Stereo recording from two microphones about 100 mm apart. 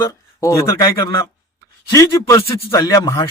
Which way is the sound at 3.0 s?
50° left (ahead or behind).